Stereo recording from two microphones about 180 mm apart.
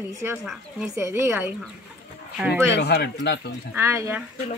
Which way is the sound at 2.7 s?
65° left (ahead or behind).